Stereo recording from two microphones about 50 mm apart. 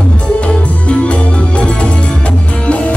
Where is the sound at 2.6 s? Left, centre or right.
Left.